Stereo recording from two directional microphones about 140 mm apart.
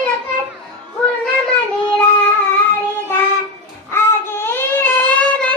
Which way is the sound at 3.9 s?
15° left (ahead or behind).